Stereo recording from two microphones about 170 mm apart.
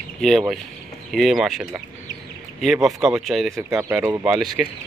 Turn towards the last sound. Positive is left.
turn(degrees=-5)  # may be behind; listen again after turning